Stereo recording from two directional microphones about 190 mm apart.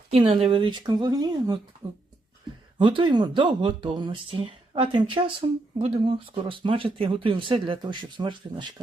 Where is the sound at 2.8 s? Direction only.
25° right (ahead or behind).